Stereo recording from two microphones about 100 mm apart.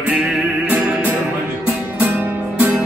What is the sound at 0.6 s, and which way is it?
Music, 15° right (ahead or behind).